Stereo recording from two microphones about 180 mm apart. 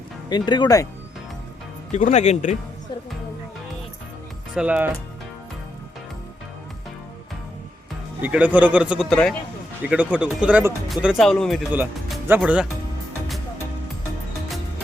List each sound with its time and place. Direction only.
0.3 s speech: 25° left (ahead or behind)
1.9 s speech: 40° left (ahead or behind)
4.5 s a man's voice: 5° right (ahead or behind)
8.2 s a man's voice: 10° right (ahead or behind)
9.8 s a man's voice: 5° right (ahead or behind)